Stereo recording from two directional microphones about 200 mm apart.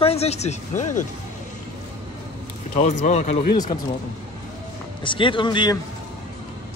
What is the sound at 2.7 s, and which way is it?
Speech, 35° left (ahead or behind).